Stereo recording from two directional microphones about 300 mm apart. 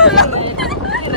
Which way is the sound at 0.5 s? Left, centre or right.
Centre.